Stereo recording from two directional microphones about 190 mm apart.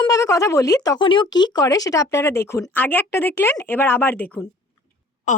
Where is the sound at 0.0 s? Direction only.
15° left (ahead or behind).